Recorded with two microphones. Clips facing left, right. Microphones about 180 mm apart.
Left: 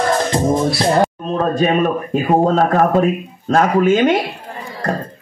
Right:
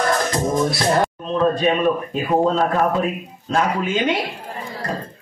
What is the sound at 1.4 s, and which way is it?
A man's voice, 50° left (ahead or behind).